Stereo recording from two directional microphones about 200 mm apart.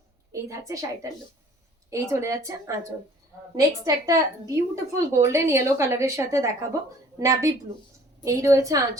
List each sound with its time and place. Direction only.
0.3 s a woman's voice: 15° right (ahead or behind)